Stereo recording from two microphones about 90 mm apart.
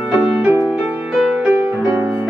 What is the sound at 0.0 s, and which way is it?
Music, 10° right (ahead or behind).